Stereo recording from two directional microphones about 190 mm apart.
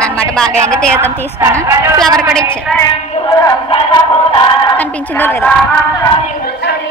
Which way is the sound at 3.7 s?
25° left (ahead or behind).